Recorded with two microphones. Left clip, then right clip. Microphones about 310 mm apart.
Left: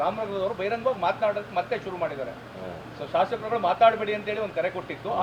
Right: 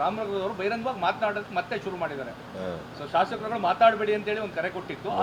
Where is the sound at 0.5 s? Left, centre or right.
Right.